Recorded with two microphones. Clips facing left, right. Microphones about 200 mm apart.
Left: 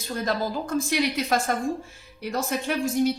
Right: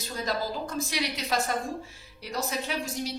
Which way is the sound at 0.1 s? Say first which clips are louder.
Left 4 dB; 55° left (ahead or behind).